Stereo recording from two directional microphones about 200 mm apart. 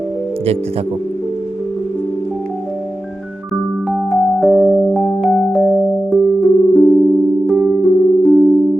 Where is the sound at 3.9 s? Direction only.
5° right (ahead or behind).